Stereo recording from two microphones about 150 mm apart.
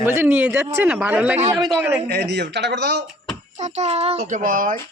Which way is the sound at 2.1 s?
90° right.